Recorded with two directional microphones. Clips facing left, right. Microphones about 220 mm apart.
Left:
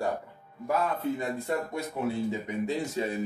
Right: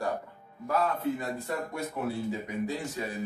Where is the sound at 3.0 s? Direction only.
25° left (ahead or behind).